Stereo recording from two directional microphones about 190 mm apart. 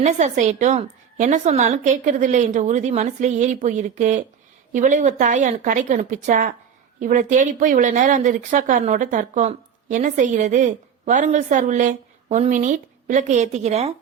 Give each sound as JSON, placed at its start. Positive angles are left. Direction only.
{"t": 0.0, "sound": "speech", "side_deg": -40}